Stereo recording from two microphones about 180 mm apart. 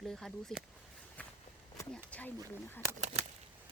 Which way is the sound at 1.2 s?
10° left (ahead or behind).